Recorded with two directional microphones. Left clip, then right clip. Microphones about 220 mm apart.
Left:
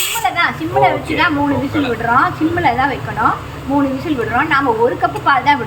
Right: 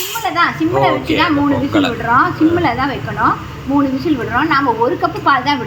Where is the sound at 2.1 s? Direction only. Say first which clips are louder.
Right 3 dB; 5° left (ahead or behind).